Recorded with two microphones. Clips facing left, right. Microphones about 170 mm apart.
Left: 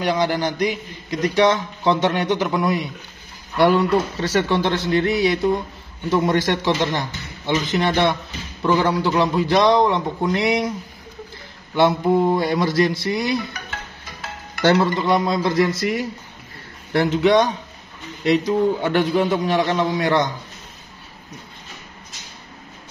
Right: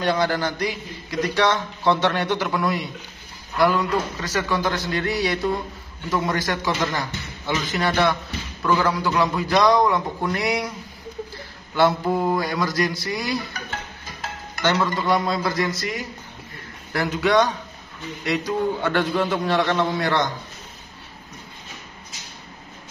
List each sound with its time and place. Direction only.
0.0 s a man's voice: 15° left (ahead or behind)
3.5 s a man's voice: 30° left (ahead or behind)
11.7 s a man's voice: 20° left (ahead or behind)
14.6 s music: 35° left (ahead or behind)
15.0 s a man's voice: 20° left (ahead or behind)